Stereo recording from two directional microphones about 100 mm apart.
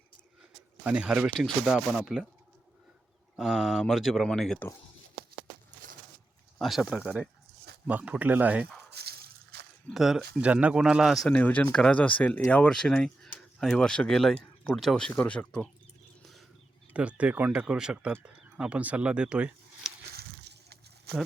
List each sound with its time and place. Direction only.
0.9 s speech: 10° right (ahead or behind)
3.3 s speech: 5° right (ahead or behind)
6.6 s speech: centre (ahead or behind)
9.9 s speech: centre (ahead or behind)
10.5 s speech: 15° right (ahead or behind)
11.3 s speech: 15° left (ahead or behind)
15.1 s speech: 15° left (ahead or behind)
16.2 s a sound: centre (ahead or behind)
16.9 s speech: 15° right (ahead or behind)
21.1 s speech: 10° right (ahead or behind)